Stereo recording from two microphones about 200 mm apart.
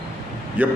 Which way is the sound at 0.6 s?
10° right (ahead or behind).